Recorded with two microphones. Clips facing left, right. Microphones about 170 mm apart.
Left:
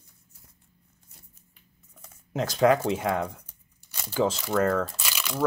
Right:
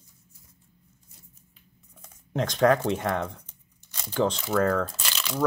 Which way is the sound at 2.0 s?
5° left (ahead or behind).